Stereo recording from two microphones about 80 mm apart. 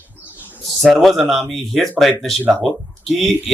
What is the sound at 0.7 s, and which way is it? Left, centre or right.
Speech, centre.